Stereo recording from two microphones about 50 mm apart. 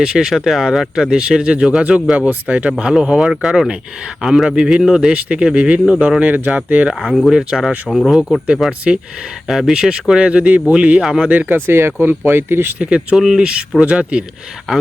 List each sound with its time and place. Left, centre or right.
0.0 s speech: centre; by 6.6 s right
6.9 s speech: centre; by 11.0 s right
11.0 s speech: centre
11.3 s speech: right
12.8 s speech: right
13.1 s speech: centre
14.7 s speech: centre